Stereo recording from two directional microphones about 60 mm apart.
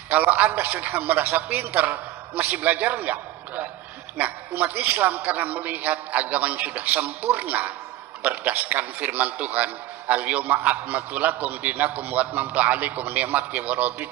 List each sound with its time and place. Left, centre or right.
0.1 s a man's voice: right